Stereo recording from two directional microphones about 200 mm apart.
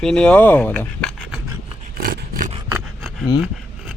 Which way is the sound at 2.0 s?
45° right (ahead or behind).